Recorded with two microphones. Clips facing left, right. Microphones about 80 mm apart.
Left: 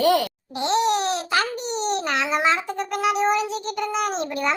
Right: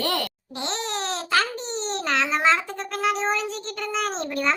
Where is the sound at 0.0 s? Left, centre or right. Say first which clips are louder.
Left 8 dB; centre.